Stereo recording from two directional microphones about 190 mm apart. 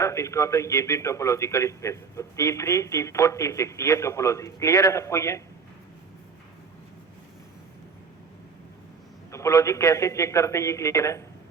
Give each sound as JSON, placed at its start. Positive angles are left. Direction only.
{"t": 0.0, "sound": "a man's voice", "side_deg": 15}
{"t": 9.3, "sound": "a man's voice", "side_deg": 15}